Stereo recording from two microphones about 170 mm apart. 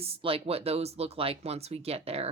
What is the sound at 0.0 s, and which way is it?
Speech, 35° right (ahead or behind).